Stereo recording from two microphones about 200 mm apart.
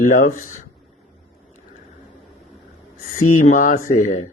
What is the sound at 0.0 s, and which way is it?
Speech, 40° left (ahead or behind).